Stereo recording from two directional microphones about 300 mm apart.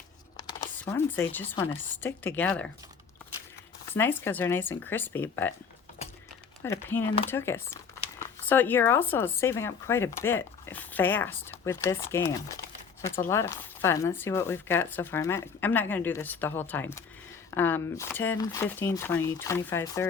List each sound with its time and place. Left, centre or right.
0.3 s speech: centre
3.9 s speech: centre
6.6 s speech: centre